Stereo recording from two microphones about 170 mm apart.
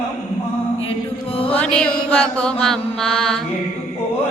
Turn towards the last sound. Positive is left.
turn(degrees=5)  # may be behind; listen again after turning